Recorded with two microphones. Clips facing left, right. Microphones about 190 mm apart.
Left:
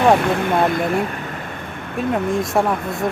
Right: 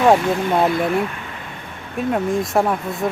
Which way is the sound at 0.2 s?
60° left (ahead or behind).